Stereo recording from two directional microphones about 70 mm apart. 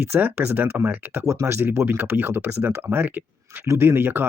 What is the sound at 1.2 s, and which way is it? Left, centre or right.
Speech, right.